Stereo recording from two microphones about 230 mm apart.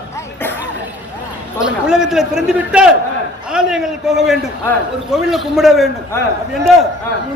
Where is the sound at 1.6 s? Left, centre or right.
Centre.